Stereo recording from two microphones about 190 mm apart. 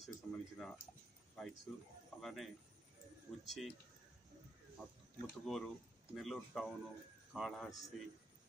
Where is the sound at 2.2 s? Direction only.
Centre (ahead or behind).